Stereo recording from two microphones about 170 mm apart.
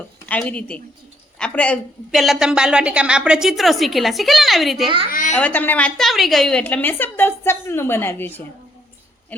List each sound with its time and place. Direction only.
0.3 s a woman's voice: 10° left (ahead or behind)
5.1 s speech: 50° left (ahead or behind)
5.4 s a woman's voice: 10° left (ahead or behind)